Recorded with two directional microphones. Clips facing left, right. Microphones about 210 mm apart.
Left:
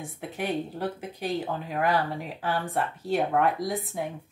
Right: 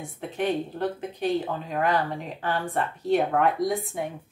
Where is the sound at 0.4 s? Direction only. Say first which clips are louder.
Right 3 dB; 5° left (ahead or behind).